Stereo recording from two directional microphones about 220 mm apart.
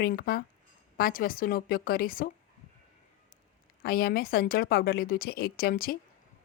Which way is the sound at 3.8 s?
45° left (ahead or behind).